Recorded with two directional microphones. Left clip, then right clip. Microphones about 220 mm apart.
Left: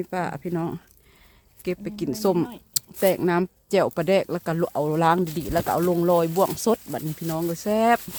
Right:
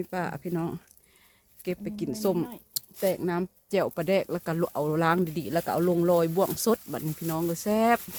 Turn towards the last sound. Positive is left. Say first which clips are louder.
# left 4 dB
turn(degrees=10)  # may be behind; listen again after turning